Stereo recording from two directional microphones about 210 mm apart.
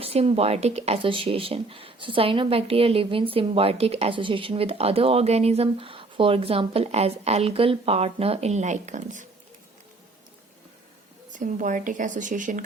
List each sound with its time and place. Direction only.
0.0 s speech: 30° right (ahead or behind)
11.3 s speech: 35° right (ahead or behind)